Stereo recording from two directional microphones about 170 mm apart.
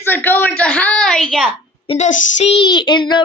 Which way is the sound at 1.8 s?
40° left (ahead or behind).